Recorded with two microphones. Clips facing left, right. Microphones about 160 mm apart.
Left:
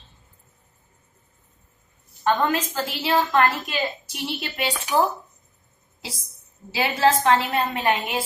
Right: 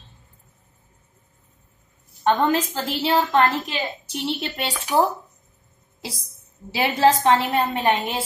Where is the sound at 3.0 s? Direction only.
25° right (ahead or behind).